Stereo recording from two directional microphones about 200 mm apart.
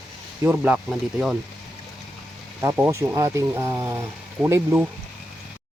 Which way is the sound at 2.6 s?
15° right (ahead or behind).